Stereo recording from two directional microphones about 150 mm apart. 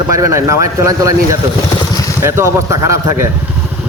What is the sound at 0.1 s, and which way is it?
A man's voice, 20° right (ahead or behind).